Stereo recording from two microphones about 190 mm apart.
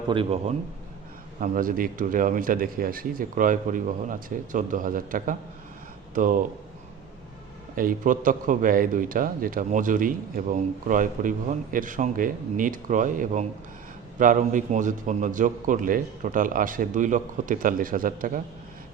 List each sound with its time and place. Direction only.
0.1 s a man's voice: 30° right (ahead or behind)
1.4 s a man's voice: 45° right (ahead or behind)
7.8 s a man's voice: 45° right (ahead or behind)